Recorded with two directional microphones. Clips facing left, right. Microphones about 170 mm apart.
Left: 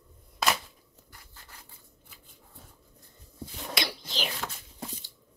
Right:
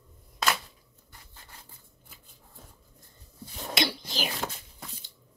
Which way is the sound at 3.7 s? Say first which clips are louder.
Right 5 dB; 25° right (ahead or behind).